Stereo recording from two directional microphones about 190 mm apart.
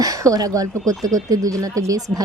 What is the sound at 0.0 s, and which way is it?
A woman's voice, 20° right (ahead or behind).